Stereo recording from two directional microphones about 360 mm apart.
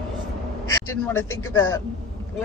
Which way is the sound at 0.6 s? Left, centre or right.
Centre.